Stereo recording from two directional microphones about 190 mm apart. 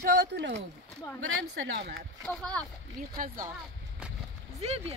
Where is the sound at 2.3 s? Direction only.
5° left (ahead or behind).